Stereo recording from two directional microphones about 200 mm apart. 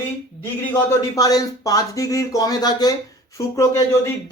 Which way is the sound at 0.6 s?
15° left (ahead or behind).